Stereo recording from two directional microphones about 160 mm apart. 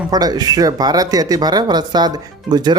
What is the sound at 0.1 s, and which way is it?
Speech, 25° right (ahead or behind).